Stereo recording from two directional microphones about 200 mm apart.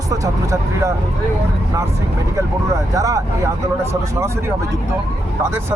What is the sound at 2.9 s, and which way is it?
Speech, 15° right (ahead or behind).